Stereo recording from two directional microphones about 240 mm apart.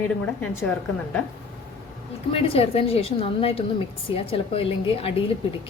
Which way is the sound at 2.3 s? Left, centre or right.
Left.